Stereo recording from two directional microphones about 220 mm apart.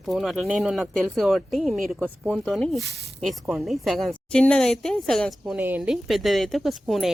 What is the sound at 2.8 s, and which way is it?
Speech, 45° right (ahead or behind).